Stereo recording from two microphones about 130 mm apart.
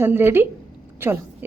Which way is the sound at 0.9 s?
15° right (ahead or behind).